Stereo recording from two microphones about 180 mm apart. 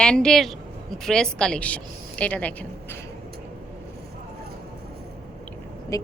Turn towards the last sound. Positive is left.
turn(degrees=15)  # may be behind; listen again after turning